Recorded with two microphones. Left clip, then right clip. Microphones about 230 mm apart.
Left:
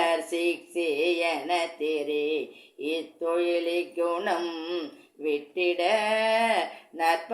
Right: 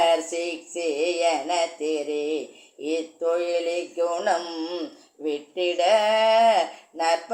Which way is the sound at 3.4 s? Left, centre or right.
Left.